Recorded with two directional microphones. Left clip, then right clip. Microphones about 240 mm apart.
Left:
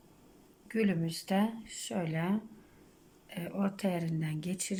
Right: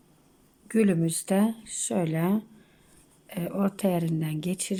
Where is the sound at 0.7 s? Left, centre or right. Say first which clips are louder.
Right 8 dB; centre.